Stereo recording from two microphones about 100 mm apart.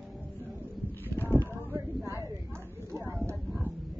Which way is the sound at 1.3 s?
20° right (ahead or behind).